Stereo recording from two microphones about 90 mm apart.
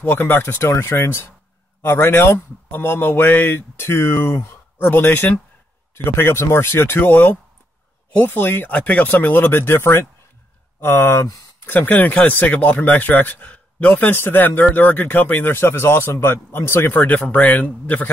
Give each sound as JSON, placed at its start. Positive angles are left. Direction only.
{"t": 0.0, "sound": "speech", "side_deg": 20}